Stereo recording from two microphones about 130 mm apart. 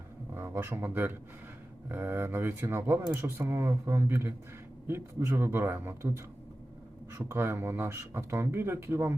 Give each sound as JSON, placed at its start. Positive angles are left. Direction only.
{"t": 0.3, "sound": "speech", "side_deg": -20}